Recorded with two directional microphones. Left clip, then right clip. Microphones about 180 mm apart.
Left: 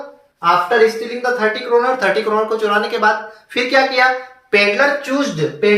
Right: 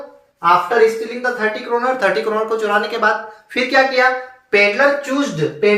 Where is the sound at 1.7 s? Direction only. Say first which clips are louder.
Left 2 dB; 15° right (ahead or behind).